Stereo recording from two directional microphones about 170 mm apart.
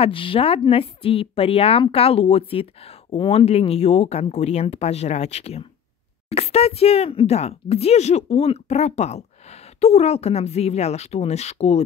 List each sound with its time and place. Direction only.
0.0 s speech: 30° left (ahead or behind)